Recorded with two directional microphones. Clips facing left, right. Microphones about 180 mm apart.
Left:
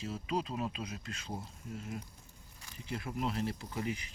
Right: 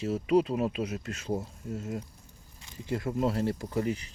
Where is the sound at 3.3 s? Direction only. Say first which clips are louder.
Right 7 dB; 40° right (ahead or behind).